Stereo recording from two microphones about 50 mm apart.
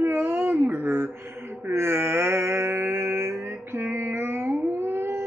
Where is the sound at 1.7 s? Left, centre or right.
Right.